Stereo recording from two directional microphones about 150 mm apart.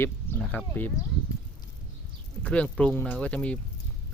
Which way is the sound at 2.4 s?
5° left (ahead or behind).